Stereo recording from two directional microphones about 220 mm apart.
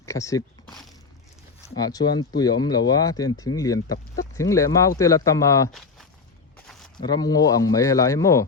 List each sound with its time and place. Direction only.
0.0 s speech: 15° left (ahead or behind)
1.7 s speech: 15° left (ahead or behind)
6.7 s a sound: centre (ahead or behind)
6.9 s speech: 20° left (ahead or behind)